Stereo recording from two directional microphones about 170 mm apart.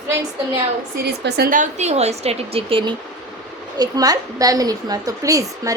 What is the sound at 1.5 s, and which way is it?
A woman's voice, 50° right (ahead or behind).